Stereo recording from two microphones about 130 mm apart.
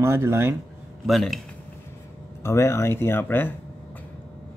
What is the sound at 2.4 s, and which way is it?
Speech, 20° left (ahead or behind).